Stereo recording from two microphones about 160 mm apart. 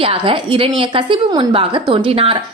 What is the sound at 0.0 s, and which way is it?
A woman's voice, 35° right (ahead or behind).